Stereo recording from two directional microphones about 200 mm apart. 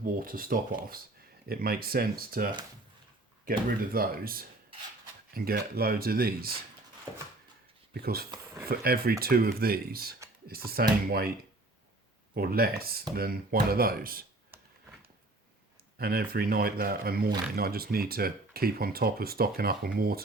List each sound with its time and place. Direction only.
0.0 s speech: 45° right (ahead or behind)
3.9 s speech: 45° right (ahead or behind)
7.9 s speech: 50° right (ahead or behind)
12.3 s speech: 50° right (ahead or behind)
14.5 s a sound: 10° right (ahead or behind)
16.0 s speech: 50° right (ahead or behind)